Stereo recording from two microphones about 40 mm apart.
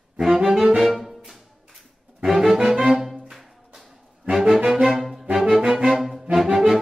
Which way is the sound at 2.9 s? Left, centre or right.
Centre.